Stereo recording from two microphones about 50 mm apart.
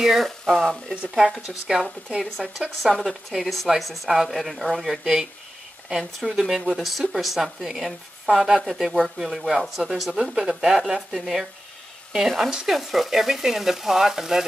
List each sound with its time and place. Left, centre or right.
0.0 s speech: centre
0.5 s speech: centre
1.1 s speech: centre
6.7 s speech: centre